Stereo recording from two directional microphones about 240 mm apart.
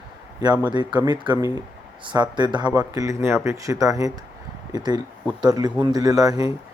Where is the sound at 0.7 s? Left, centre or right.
Centre.